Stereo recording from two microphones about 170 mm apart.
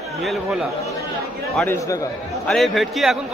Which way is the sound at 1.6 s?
15° left (ahead or behind).